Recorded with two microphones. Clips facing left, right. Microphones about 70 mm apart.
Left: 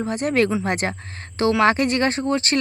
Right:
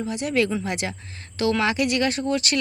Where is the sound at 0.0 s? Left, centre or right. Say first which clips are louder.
Left 3 dB; left.